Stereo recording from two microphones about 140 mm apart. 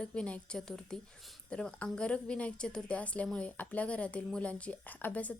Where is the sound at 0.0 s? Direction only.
5° left (ahead or behind).